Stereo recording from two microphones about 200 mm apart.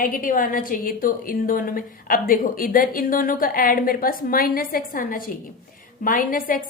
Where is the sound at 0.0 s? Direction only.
45° left (ahead or behind).